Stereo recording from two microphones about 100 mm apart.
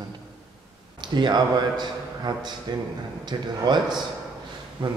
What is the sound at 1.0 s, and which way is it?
A man's voice, 45° right (ahead or behind).